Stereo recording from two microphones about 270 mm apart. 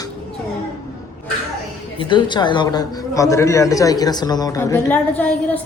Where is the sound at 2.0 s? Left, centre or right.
Centre.